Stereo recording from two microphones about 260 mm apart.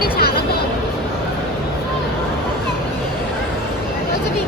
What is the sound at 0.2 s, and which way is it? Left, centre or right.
Music, left.